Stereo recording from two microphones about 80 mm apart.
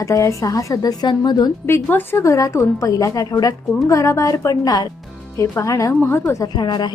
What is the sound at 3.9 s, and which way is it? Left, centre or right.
Speech, left.